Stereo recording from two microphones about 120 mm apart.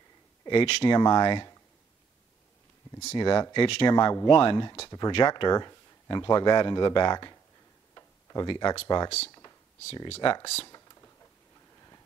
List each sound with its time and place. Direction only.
0.5 s speech: 50° left (ahead or behind)
0.8 s a man's voice: 35° left (ahead or behind)
3.2 s a man's voice: 35° left (ahead or behind)
3.9 s a man's voice: 30° left (ahead or behind)
7.9 s tick-tock: 30° left (ahead or behind)
8.8 s a man's voice: 35° left (ahead or behind)
10.4 s speech: 55° left (ahead or behind)